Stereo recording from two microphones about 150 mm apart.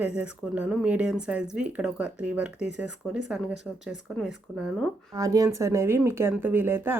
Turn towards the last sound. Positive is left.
turn(degrees=-15)  # may be behind; listen again after turning